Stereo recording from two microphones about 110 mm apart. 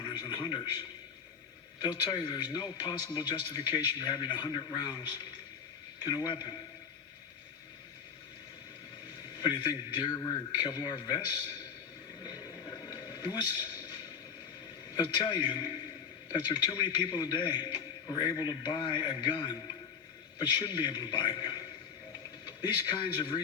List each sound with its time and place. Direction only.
0.0 s television: 45° left (ahead or behind)
1.8 s a man's voice: 40° left (ahead or behind)
6.1 s a man's voice: 40° left (ahead or behind)
9.4 s a man's voice: 45° left (ahead or behind)
12.2 s a sound: 35° left (ahead or behind)
14.9 s a man's voice: 40° left (ahead or behind)
22.6 s a man's voice: 45° left (ahead or behind)